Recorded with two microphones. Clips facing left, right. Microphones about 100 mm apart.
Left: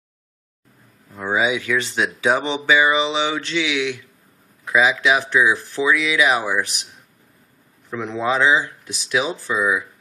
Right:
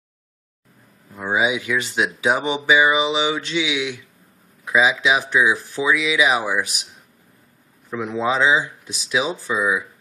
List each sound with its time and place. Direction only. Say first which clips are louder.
1.1 s speech: even; 5° right (ahead or behind)
1.4 s speech: left 1 dB; 15° right (ahead or behind)
7.9 s speech: even; 10° right (ahead or behind)